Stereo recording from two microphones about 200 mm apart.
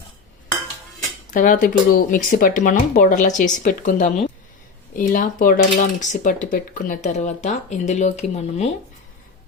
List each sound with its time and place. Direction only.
1.3 s speech: 40° left (ahead or behind)